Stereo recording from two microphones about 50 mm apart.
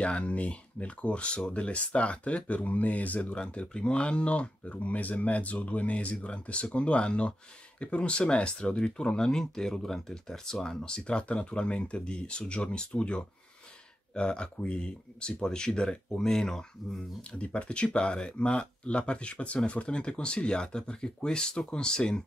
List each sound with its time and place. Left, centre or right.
0.0 s speech: left
17.2 s speech: left